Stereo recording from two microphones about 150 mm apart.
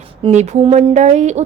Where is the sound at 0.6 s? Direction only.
35° right (ahead or behind).